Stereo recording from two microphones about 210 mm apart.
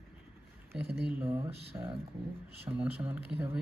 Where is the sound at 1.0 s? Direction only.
10° right (ahead or behind).